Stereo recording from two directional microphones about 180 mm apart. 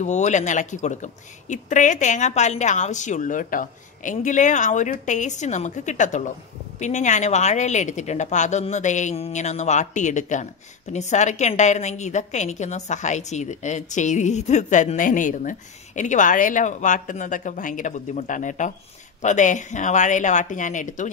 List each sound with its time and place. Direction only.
0.0 s a woman's voice: 40° left (ahead or behind)